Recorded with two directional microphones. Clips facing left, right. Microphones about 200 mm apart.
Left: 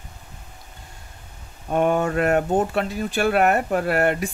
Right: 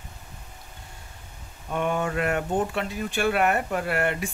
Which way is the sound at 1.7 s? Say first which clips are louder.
Left 6 dB; 45° left (ahead or behind).